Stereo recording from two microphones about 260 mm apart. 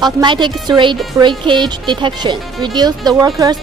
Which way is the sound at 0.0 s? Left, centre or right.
Centre.